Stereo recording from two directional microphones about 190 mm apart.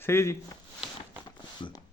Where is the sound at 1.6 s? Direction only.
25° left (ahead or behind).